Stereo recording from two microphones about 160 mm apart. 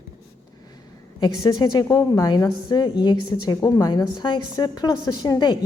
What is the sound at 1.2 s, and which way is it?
A woman's voice, 25° left (ahead or behind).